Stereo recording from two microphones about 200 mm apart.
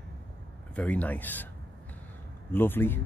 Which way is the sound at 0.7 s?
5° left (ahead or behind).